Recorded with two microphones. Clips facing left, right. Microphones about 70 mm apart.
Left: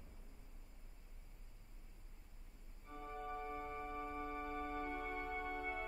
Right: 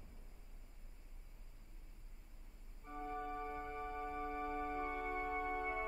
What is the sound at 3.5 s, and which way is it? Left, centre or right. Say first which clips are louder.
Music: right 1 dB; centre.